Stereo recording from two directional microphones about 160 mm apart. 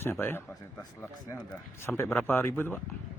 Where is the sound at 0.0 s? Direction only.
15° left (ahead or behind).